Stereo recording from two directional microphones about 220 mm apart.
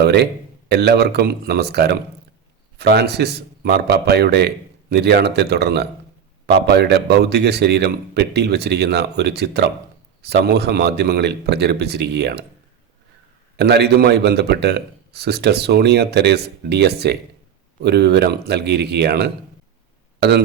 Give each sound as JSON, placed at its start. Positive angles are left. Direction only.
{"t": 0.0, "sound": "a man's voice", "side_deg": -50}
{"t": 13.6, "sound": "a man's voice", "side_deg": -50}